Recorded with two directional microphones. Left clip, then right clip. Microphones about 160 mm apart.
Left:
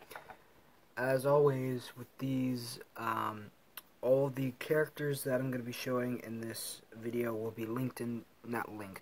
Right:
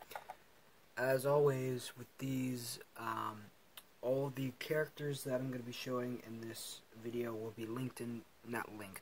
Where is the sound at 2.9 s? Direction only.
30° left (ahead or behind).